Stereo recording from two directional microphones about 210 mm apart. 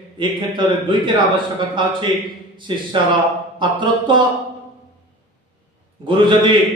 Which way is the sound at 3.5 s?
20° right (ahead or behind).